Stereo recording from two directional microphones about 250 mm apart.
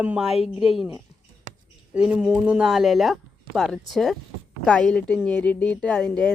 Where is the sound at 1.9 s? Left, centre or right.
Centre.